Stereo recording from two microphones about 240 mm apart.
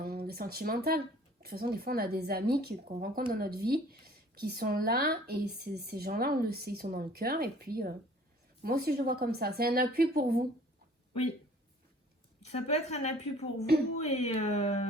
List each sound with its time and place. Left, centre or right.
0.0 s speech: right
12.4 s a woman's voice: left